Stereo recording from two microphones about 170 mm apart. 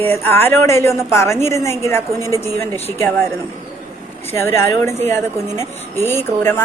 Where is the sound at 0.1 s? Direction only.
15° left (ahead or behind).